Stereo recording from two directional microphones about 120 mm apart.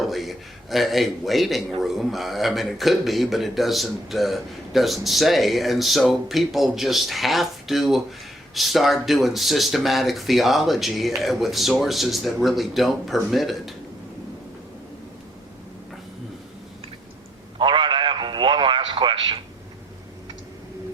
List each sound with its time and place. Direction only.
0.0 s a man's voice: centre (ahead or behind)
17.6 s radio: 45° right (ahead or behind)